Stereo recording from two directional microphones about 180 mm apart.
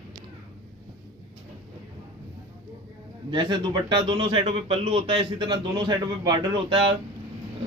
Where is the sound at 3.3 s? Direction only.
25° right (ahead or behind).